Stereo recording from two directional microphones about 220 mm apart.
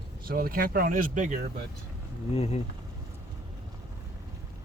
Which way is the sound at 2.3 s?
30° left (ahead or behind).